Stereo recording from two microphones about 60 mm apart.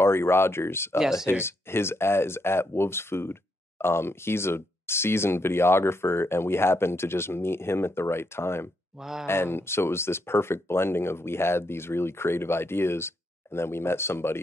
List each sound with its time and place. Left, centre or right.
0.0 s speech: left
9.0 s speech: centre
9.3 s speech: left